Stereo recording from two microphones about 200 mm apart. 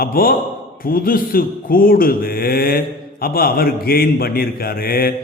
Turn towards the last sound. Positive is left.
turn(degrees=45)  # may be behind; listen again after turning